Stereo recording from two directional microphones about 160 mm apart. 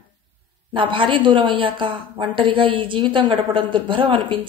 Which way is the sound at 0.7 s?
30° right (ahead or behind).